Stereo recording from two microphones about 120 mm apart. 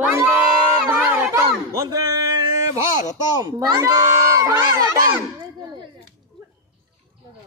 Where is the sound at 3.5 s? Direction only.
30° right (ahead or behind).